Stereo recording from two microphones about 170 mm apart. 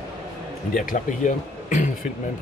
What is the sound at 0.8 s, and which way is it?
Speech, 50° left (ahead or behind).